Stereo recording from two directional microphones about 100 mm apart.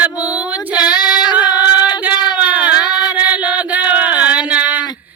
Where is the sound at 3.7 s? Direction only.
15° right (ahead or behind).